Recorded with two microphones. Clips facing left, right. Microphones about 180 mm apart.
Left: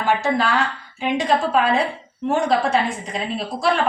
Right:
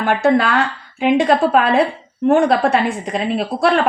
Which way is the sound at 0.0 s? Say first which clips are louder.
Right 5 dB; 60° right (ahead or behind).